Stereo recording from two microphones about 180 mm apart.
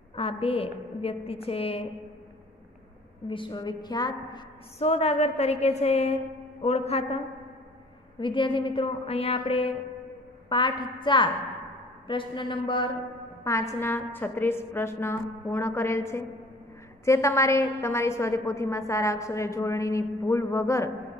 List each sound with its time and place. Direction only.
0.1 s a woman's voice: 30° left (ahead or behind)
3.3 s a woman's voice: 25° left (ahead or behind)